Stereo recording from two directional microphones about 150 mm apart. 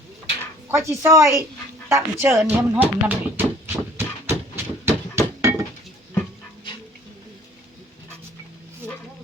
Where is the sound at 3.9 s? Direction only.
15° right (ahead or behind).